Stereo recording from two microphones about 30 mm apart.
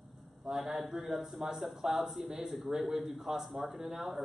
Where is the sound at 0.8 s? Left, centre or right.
Centre.